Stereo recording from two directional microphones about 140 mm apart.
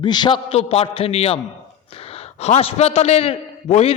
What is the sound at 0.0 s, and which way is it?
A man's voice, 30° left (ahead or behind).